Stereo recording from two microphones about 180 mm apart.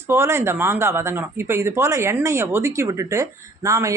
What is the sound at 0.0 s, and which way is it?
Speech, 15° right (ahead or behind).